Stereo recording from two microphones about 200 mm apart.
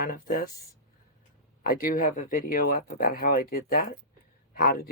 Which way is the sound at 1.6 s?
45° left (ahead or behind).